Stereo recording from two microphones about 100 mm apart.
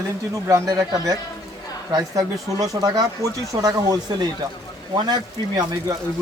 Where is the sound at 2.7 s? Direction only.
50° right (ahead or behind).